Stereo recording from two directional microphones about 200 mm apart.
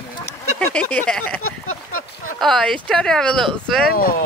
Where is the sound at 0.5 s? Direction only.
5° left (ahead or behind).